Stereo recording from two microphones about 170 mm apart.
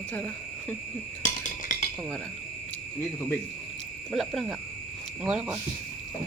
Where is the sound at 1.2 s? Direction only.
45° left (ahead or behind).